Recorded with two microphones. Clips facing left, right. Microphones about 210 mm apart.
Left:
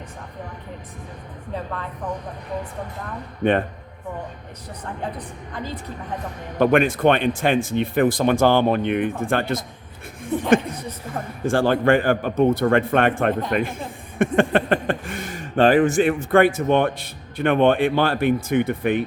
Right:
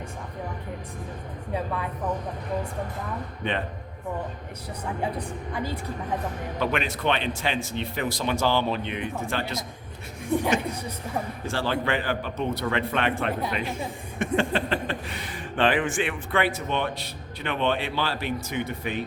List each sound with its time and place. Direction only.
1.5 s a woman's voice: 10° right (ahead or behind)
3.4 s speech: 50° left (ahead or behind)
6.6 s speech: 50° left (ahead or behind)
10.8 s a woman's voice: 10° right (ahead or behind)
11.2 s speech: 50° left (ahead or behind)